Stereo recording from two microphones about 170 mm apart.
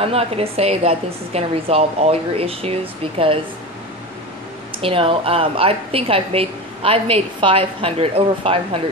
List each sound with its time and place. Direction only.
0.0 s a woman's voice: 35° right (ahead or behind)
4.8 s a woman's voice: 35° right (ahead or behind)